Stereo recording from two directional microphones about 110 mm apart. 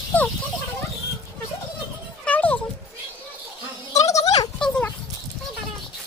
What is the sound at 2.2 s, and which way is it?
Music, 15° left (ahead or behind).